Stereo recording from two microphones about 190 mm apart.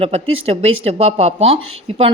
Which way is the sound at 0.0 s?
30° right (ahead or behind).